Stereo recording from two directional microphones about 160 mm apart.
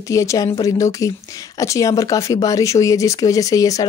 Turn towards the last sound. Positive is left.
turn(degrees=20)  # may be behind; listen again after turning